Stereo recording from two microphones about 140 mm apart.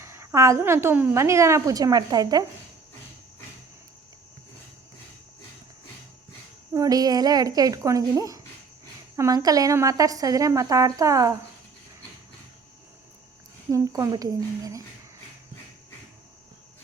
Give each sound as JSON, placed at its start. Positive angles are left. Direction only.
{"t": 0.0, "sound": "a woman's voice", "side_deg": -20}
{"t": 6.7, "sound": "a woman's voice", "side_deg": -25}
{"t": 13.7, "sound": "a woman's voice", "side_deg": -20}